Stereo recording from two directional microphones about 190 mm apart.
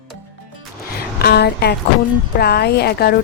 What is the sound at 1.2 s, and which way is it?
A woman's voice, 55° left (ahead or behind).